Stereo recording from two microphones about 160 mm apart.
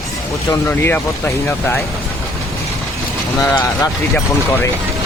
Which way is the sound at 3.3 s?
15° left (ahead or behind).